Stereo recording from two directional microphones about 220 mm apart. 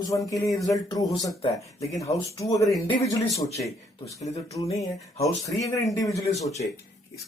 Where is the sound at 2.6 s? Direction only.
Centre (ahead or behind).